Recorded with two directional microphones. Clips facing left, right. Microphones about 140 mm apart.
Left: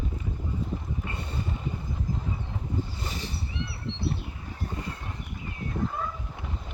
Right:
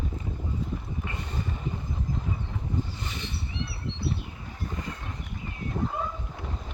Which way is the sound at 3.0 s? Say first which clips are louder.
Left 1 dB; 35° left (ahead or behind).